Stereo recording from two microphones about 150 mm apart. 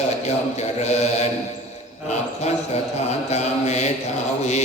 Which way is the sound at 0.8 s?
45° left (ahead or behind).